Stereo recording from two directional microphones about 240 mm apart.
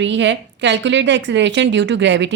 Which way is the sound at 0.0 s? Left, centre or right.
Right.